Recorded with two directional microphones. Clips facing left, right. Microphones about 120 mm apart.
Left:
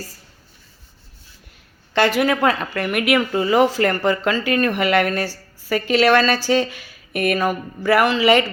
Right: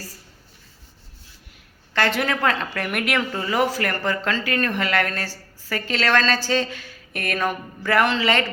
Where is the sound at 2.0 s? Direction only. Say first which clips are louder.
Left 4 dB; 10° left (ahead or behind).